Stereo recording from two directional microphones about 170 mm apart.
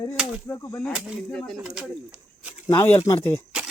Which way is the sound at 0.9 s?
5° left (ahead or behind).